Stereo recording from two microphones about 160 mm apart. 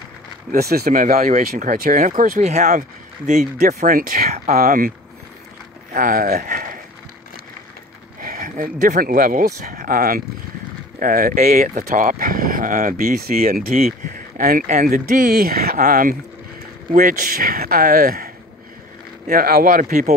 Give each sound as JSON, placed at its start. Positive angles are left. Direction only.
{"t": 0.5, "sound": "speech", "side_deg": -75}
{"t": 1.1, "sound": "speech", "side_deg": -50}
{"t": 2.4, "sound": "speech", "side_deg": -45}
{"t": 3.3, "sound": "speech", "side_deg": -60}
{"t": 5.9, "sound": "speech", "side_deg": -60}
{"t": 8.2, "sound": "speech", "side_deg": -60}